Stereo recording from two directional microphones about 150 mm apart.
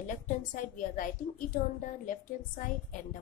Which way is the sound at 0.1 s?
55° left (ahead or behind).